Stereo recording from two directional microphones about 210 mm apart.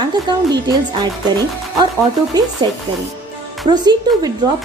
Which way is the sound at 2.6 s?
20° right (ahead or behind).